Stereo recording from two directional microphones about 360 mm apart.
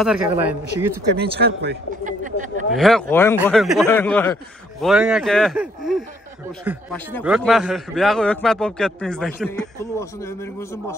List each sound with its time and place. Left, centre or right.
0.0 s a man's voice: centre
1.4 s a man's voice: right
2.7 s a man's voice: centre